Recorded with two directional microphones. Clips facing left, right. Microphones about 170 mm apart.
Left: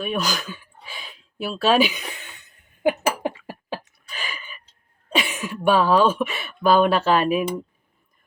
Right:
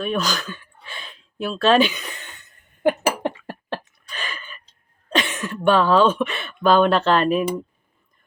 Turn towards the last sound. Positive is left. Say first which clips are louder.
# right 1 dB
turn(degrees=10)  # may be behind; listen again after turning